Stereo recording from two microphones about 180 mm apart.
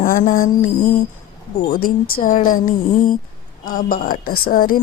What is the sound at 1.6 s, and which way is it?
Speech, 55° left (ahead or behind).